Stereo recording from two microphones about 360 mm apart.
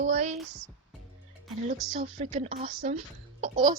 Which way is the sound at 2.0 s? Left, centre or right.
Centre.